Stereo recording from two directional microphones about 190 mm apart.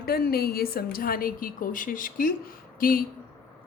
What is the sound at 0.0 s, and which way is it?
A woman's voice, 55° left (ahead or behind).